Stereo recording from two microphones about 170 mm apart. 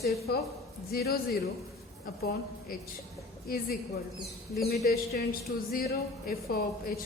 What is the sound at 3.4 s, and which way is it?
Speech, 60° left (ahead or behind).